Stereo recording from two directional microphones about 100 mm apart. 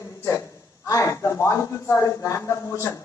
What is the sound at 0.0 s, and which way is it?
A man's voice, 30° left (ahead or behind).